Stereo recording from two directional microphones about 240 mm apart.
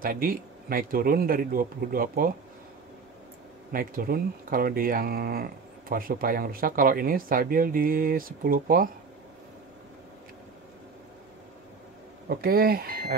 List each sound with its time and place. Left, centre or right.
0.0 s speech: right
3.7 s speech: right
12.3 s speech: right